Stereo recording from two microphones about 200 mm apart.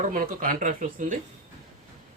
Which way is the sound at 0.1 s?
45° right (ahead or behind).